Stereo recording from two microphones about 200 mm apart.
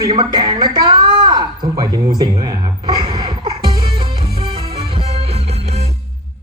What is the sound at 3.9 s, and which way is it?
Music, 30° right (ahead or behind).